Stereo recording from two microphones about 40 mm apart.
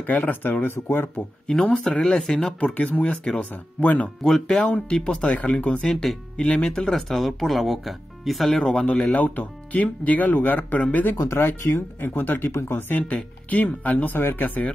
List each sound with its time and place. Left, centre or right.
0.0 s speech: left
1.6 s speech: centre
2.6 s speech: left
4.2 s speech: centre
4.6 s speech: left
4.8 s speech: left
5.9 s speech: centre
6.4 s speech: left
6.9 s speech: centre
9.1 s speech: left
11.1 s speech: left
12.0 s speech: left
12.9 s speech: left